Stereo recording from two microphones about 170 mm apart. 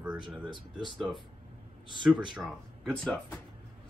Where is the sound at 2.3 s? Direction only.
Centre (ahead or behind).